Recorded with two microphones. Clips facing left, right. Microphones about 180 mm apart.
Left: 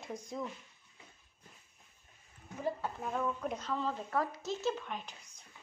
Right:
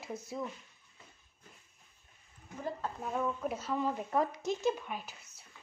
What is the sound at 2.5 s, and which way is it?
Speech, 5° left (ahead or behind).